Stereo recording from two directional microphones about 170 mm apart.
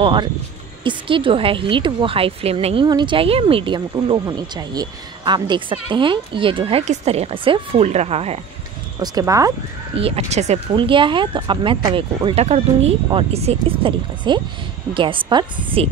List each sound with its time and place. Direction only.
0.0 s a woman's voice: 30° right (ahead or behind)
9.0 s speech: 20° right (ahead or behind)
9.9 s a woman's voice: 35° right (ahead or behind)
10.7 s speech: 30° right (ahead or behind)